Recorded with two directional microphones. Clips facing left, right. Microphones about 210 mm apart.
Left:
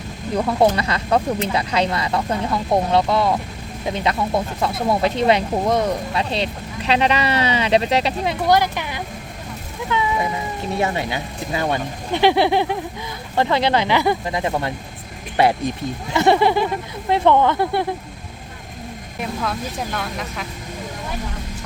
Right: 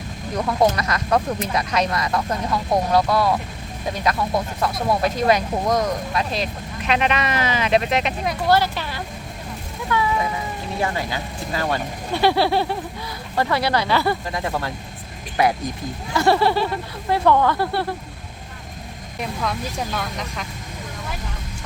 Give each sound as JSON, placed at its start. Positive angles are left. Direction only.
{"t": 0.3, "sound": "speech", "side_deg": 30}
{"t": 8.4, "sound": "speech", "side_deg": 15}
{"t": 19.2, "sound": "speech", "side_deg": 0}